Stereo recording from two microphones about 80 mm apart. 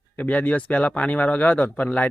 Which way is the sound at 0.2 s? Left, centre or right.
Centre.